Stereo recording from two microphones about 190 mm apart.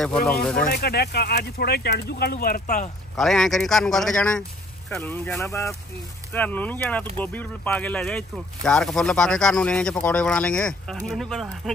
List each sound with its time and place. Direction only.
0.3 s speech: 5° left (ahead or behind)
0.7 s speech: 55° left (ahead or behind); by 2.9 s 40° left (ahead or behind)
3.2 s speech: centre (ahead or behind)